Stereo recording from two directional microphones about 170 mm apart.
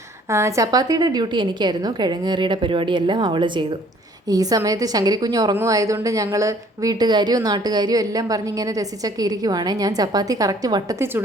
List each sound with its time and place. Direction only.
0.3 s a woman's voice: 15° right (ahead or behind)